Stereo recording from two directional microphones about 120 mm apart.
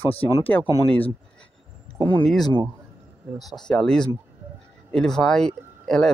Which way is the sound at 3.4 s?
Centre (ahead or behind).